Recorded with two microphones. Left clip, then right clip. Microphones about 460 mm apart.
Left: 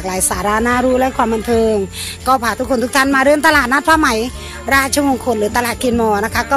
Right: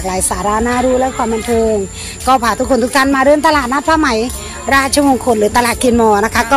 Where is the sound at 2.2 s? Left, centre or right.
Left.